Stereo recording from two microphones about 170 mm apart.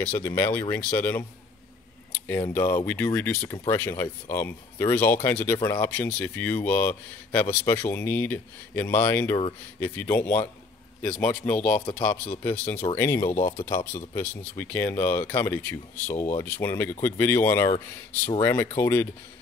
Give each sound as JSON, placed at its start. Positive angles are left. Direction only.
{"t": 0.1, "sound": "speech", "side_deg": 15}
{"t": 2.1, "sound": "a sound", "side_deg": 10}
{"t": 2.5, "sound": "speech", "side_deg": 15}